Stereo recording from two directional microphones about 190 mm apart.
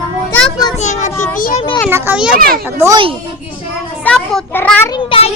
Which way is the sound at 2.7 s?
15° right (ahead or behind).